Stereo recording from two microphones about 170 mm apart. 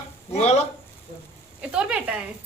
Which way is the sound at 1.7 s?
5° right (ahead or behind).